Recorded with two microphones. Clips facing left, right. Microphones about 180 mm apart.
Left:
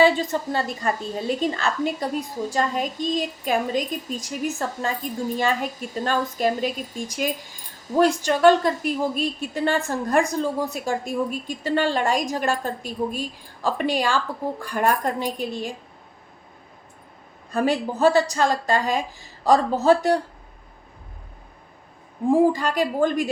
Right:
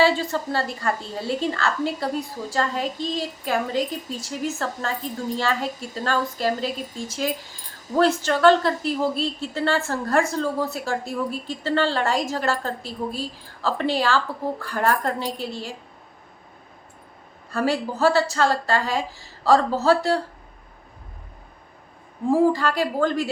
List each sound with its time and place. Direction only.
0.0 s a woman's voice: 20° left (ahead or behind)
17.5 s a woman's voice: 20° left (ahead or behind)
22.3 s a woman's voice: 15° left (ahead or behind)